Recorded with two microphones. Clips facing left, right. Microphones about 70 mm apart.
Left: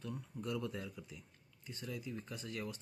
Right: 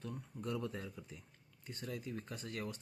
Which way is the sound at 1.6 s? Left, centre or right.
Right.